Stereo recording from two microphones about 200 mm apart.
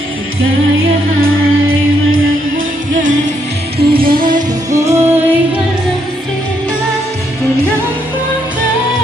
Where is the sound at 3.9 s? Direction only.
45° right (ahead or behind).